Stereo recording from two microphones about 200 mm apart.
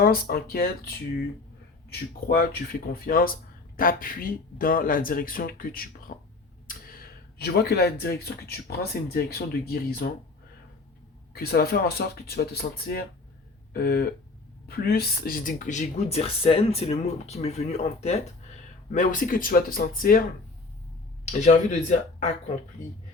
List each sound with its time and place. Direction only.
0.0 s speech: 45° left (ahead or behind)
1.9 s speech: 50° left (ahead or behind)
11.3 s speech: 50° left (ahead or behind)
21.4 s speech: 35° left (ahead or behind)